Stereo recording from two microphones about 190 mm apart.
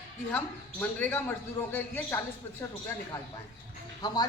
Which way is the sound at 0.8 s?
10° left (ahead or behind).